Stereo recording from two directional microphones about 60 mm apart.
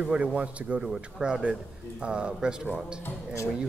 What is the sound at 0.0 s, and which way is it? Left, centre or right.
Speech, centre.